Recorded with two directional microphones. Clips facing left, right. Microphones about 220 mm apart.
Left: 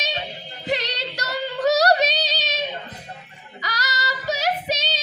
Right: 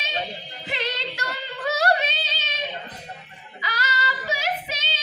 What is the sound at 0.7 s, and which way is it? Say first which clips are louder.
Female singing: left 4 dB; 40° left (ahead or behind).